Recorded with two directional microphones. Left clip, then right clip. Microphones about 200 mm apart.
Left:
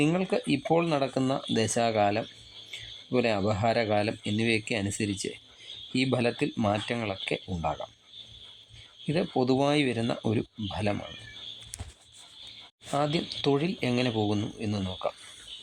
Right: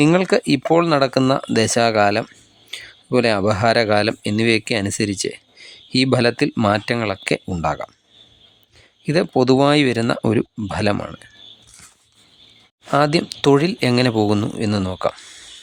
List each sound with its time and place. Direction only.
0.0 s speech: 40° right (ahead or behind)
9.0 s speech: 35° right (ahead or behind)
12.9 s speech: 35° right (ahead or behind)